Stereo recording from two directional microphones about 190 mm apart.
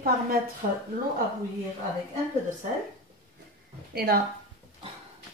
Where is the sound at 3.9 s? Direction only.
55° right (ahead or behind).